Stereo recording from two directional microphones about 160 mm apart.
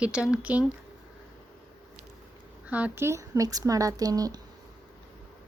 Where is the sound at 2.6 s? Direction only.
10° right (ahead or behind).